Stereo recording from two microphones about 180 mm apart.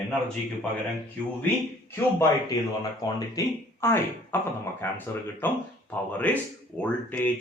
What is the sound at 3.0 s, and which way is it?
Speech, 20° left (ahead or behind).